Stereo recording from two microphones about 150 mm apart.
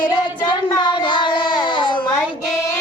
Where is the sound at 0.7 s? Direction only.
30° left (ahead or behind).